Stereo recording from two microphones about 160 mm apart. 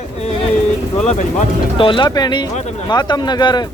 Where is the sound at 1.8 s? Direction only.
30° left (ahead or behind).